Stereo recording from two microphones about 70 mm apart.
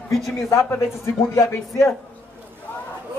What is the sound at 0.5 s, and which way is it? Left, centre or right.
Speech, left.